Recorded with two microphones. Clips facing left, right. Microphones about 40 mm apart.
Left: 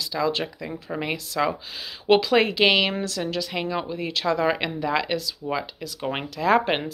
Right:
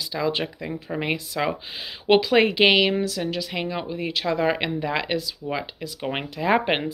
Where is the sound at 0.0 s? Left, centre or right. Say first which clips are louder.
Even; centre.